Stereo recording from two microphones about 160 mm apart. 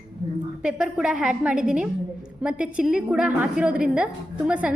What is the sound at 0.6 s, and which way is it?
A woman's voice, 5° right (ahead or behind).